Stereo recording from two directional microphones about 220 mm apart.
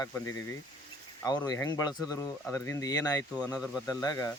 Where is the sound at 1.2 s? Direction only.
15° left (ahead or behind).